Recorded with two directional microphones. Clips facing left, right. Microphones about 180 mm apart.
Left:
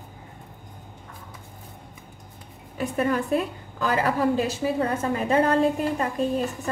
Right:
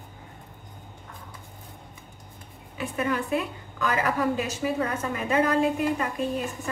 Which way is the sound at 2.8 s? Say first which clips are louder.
Left 4 dB; 40° left (ahead or behind).